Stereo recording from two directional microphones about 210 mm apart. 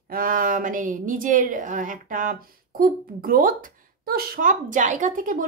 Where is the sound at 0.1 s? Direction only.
40° right (ahead or behind).